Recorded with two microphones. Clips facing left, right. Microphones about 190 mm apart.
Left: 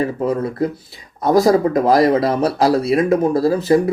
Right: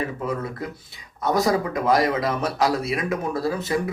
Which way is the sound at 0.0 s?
35° left (ahead or behind).